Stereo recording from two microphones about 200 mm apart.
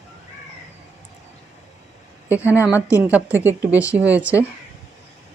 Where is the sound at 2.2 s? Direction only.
10° right (ahead or behind).